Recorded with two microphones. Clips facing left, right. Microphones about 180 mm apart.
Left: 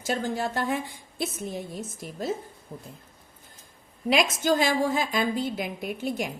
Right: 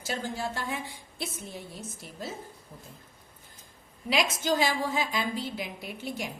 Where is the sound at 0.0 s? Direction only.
50° left (ahead or behind).